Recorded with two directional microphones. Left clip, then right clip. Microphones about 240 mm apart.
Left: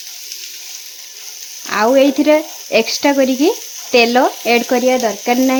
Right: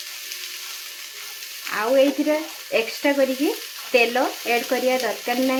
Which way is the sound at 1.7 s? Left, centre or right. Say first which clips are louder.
Left 7 dB; left.